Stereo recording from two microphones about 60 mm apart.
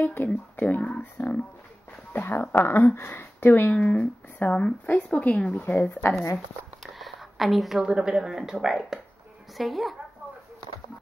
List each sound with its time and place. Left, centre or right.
0.0 s speech: left
2.1 s speech: left
5.8 s speech: left
7.0 s a woman's voice: centre